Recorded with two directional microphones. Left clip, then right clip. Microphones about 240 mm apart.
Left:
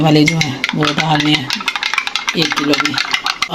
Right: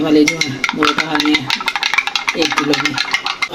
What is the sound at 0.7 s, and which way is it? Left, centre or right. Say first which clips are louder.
Stir: left 1 dB; centre.